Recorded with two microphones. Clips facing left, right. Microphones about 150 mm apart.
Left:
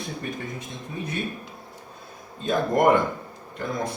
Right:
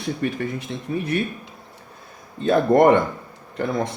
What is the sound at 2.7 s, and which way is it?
Speech, 60° right (ahead or behind).